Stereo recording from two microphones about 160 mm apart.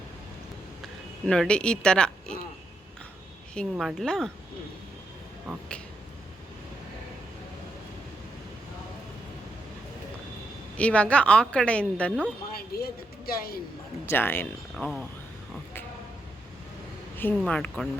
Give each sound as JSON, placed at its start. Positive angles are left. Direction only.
{"t": 1.3, "sound": "speech", "side_deg": 5}
{"t": 3.5, "sound": "speech", "side_deg": 0}
{"t": 10.8, "sound": "a woman's voice", "side_deg": 5}
{"t": 12.5, "sound": "speech", "side_deg": 70}
{"t": 14.0, "sound": "a woman's voice", "side_deg": 15}
{"t": 17.2, "sound": "a woman's voice", "side_deg": 10}